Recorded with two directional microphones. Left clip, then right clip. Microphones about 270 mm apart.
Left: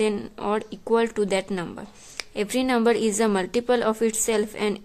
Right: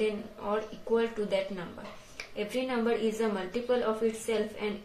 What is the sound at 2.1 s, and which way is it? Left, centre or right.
A woman's voice, left.